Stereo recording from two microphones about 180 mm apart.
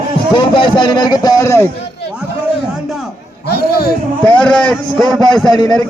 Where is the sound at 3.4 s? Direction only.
60° left (ahead or behind).